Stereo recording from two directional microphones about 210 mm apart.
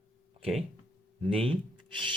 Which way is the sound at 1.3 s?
25° right (ahead or behind).